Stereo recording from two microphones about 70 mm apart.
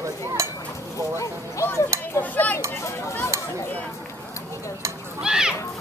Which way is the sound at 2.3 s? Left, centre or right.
Left.